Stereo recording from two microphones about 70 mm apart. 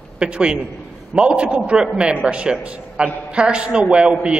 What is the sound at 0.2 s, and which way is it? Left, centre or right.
A woman's voice, centre.